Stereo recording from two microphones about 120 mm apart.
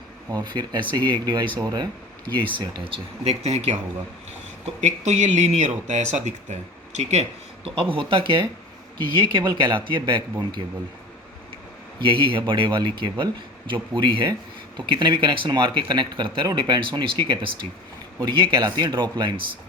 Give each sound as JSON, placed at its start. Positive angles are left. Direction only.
{"t": 0.3, "sound": "speech", "side_deg": -35}
{"t": 7.9, "sound": "speech", "side_deg": -45}
{"t": 11.9, "sound": "speech", "side_deg": -45}